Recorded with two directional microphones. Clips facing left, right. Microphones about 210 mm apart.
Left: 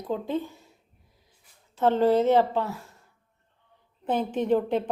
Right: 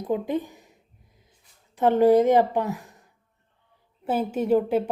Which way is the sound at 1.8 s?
10° right (ahead or behind).